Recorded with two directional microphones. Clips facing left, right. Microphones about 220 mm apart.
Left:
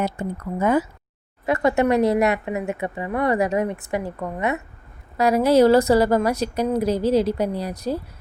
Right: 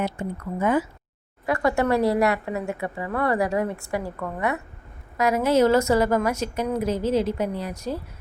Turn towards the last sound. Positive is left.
turn(degrees=35)  # may be behind; listen again after turning